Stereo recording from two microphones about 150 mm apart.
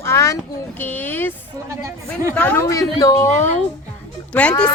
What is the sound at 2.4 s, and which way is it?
A woman's voice, 15° left (ahead or behind).